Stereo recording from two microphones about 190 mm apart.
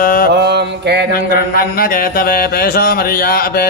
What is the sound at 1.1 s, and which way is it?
Mantra, 50° left (ahead or behind).